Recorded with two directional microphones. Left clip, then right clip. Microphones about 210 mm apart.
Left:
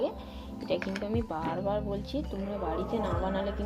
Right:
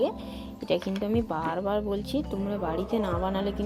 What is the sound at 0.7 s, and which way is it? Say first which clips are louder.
Speech: right 4 dB; 35° right (ahead or behind).